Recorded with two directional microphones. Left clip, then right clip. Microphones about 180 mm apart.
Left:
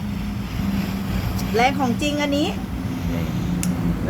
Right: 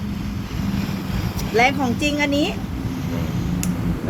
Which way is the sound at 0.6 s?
20° left (ahead or behind).